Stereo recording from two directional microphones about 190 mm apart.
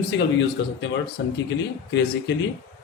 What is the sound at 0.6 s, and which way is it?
Speech, 65° left (ahead or behind).